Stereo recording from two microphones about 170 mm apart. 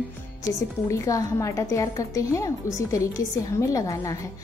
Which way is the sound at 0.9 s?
20° left (ahead or behind).